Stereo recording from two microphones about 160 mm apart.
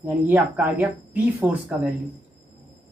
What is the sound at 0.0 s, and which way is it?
Speech, 10° right (ahead or behind).